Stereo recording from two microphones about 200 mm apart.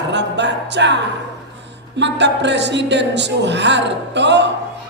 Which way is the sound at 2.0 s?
60° right (ahead or behind).